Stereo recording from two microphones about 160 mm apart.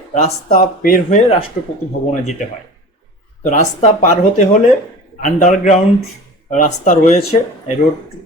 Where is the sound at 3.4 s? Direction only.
50° left (ahead or behind).